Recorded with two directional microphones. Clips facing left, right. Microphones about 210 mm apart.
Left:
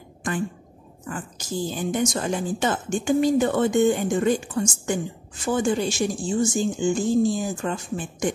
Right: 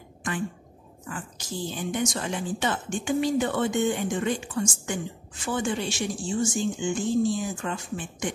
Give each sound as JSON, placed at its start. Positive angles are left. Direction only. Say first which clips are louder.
{"t": 1.0, "sound": "speech", "louder": "left 4 dB", "side_deg": 40}